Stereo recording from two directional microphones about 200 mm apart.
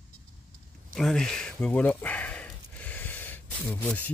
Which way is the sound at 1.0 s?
Centre (ahead or behind).